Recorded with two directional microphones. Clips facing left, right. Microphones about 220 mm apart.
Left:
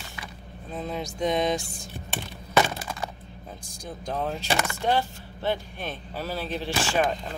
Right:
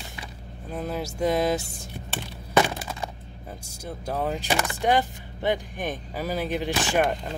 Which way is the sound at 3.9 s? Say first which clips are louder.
Right 2 dB; 5° right (ahead or behind).